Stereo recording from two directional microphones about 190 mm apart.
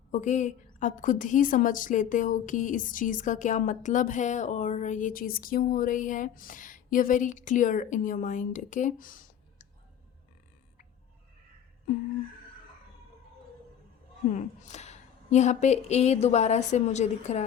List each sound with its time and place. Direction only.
0.1 s a woman's voice: 40° left (ahead or behind)
14.3 s a woman's voice: 40° left (ahead or behind)